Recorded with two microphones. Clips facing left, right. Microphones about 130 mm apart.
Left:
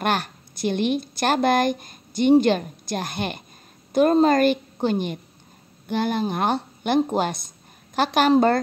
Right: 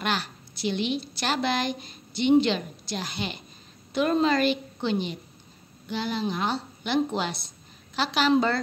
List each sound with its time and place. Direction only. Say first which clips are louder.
0.0 s a woman's voice: left 5 dB; 50° left (ahead or behind)